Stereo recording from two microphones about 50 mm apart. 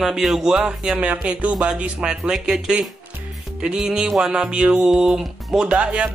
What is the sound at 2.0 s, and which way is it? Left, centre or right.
Speech, centre.